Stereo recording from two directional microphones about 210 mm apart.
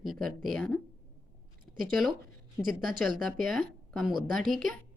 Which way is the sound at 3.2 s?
Centre (ahead or behind).